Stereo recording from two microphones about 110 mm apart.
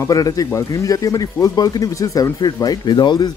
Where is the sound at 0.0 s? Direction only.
30° left (ahead or behind).